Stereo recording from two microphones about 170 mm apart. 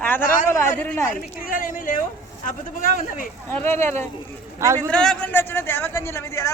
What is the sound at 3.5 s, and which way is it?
A man's voice, 15° left (ahead or behind).